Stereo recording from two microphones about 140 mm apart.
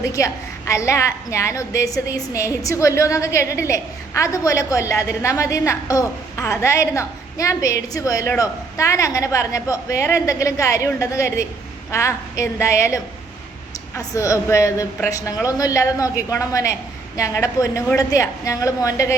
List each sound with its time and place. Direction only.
0.0 s a woman's voice: 20° left (ahead or behind)